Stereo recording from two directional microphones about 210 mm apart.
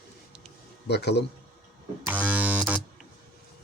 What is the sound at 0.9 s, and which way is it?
Speech, 55° left (ahead or behind).